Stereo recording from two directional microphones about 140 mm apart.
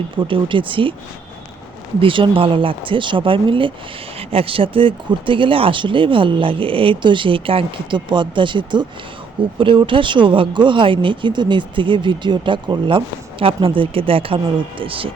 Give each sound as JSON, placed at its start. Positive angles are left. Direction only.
{"t": 0.2, "sound": "speech", "side_deg": -35}
{"t": 2.0, "sound": "speech", "side_deg": -35}